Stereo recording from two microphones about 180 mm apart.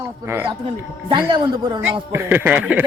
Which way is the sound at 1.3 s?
25° right (ahead or behind).